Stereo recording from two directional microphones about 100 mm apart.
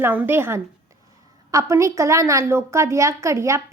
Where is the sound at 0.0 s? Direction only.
20° right (ahead or behind).